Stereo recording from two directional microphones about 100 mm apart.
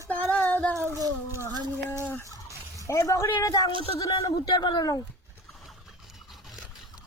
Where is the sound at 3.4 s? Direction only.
40° left (ahead or behind).